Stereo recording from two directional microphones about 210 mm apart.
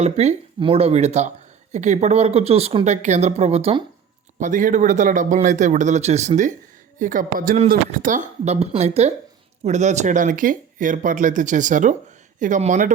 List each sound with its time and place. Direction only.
0.0 s speech: 30° right (ahead or behind)
4.4 s speech: 35° right (ahead or behind)